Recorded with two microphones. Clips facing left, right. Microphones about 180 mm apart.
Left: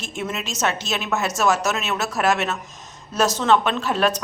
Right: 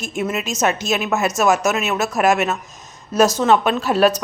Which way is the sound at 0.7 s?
45° right (ahead or behind).